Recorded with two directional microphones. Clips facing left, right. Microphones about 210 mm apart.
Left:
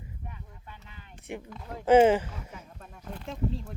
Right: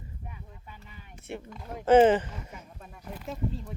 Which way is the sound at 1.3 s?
15° left (ahead or behind).